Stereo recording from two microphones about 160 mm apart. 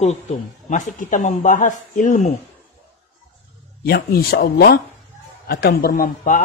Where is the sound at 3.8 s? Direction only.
70° left (ahead or behind).